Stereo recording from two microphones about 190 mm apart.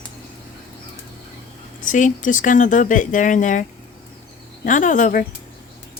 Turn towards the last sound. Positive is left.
turn(degrees=40)  # may be behind; listen again after turning